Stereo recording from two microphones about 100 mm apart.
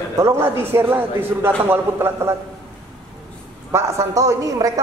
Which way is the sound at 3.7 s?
30° right (ahead or behind).